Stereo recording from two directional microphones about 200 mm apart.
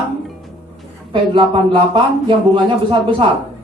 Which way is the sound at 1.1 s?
25° right (ahead or behind).